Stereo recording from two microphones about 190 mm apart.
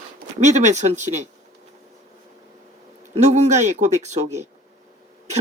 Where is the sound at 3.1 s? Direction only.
35° right (ahead or behind).